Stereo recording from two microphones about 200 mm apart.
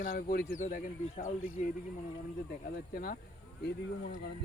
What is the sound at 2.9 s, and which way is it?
Speech, 50° left (ahead or behind).